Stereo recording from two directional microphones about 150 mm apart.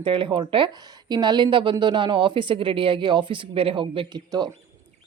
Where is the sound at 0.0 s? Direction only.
35° right (ahead or behind).